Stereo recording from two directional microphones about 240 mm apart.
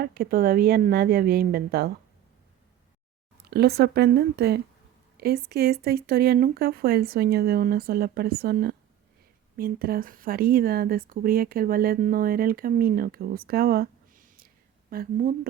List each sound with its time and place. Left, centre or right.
0.0 s speech: right
3.5 s speech: right